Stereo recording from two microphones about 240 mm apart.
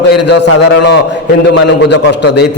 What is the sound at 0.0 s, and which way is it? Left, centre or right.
A man's voice, left.